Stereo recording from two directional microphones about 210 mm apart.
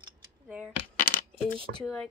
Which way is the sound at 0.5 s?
5° right (ahead or behind).